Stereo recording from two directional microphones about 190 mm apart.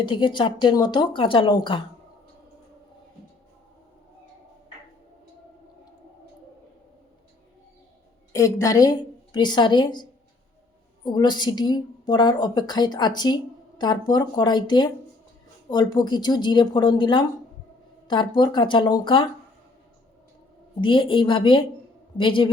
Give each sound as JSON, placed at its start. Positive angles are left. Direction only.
{"t": 0.0, "sound": "a woman's voice", "side_deg": 25}
{"t": 8.3, "sound": "a woman's voice", "side_deg": 15}
{"t": 20.8, "sound": "a woman's voice", "side_deg": 25}